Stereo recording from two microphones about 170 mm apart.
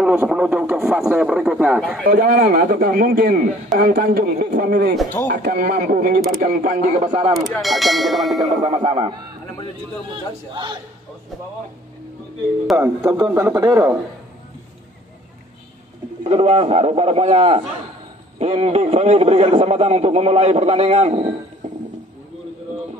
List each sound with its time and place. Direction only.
0.0 s speech: 5° right (ahead or behind)
2.0 s a man's voice: 55° right (ahead or behind)
7.1 s a man's voice: 30° right (ahead or behind)
7.3 s speech: centre (ahead or behind)
8.6 s a man's voice: 30° right (ahead or behind)
10.1 s a man's voice: 25° right (ahead or behind)
12.7 s a man's voice: 15° right (ahead or behind)
16.3 s a man's voice: 35° right (ahead or behind)